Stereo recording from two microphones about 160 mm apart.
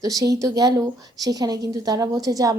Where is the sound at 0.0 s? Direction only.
20° right (ahead or behind).